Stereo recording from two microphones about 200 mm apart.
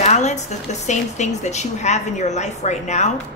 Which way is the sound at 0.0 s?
35° left (ahead or behind).